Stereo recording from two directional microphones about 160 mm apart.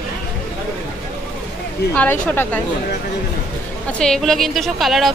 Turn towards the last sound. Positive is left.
turn(degrees=0)  # may be behind; listen again after turning